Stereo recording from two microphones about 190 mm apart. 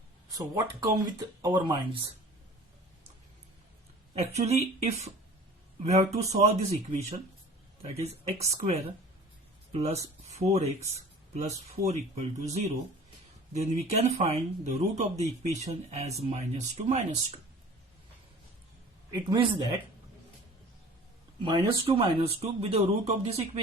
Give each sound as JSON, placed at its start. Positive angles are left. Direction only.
{"t": 0.3, "sound": "speech", "side_deg": -20}
{"t": 4.1, "sound": "speech", "side_deg": -35}
{"t": 19.1, "sound": "speech", "side_deg": -25}
{"t": 21.4, "sound": "speech", "side_deg": -30}